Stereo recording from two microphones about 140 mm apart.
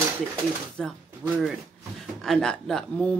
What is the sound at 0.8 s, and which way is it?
Speech, centre (ahead or behind).